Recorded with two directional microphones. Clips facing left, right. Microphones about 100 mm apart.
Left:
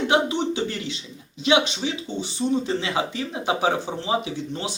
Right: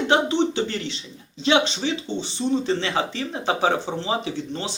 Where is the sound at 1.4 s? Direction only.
10° left (ahead or behind).